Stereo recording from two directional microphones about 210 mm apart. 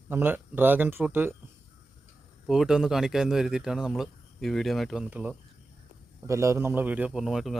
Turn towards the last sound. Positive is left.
turn(degrees=0)  # may be behind; listen again after turning